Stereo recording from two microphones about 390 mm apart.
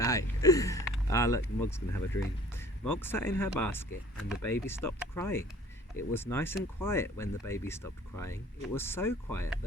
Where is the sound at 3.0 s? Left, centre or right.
Centre.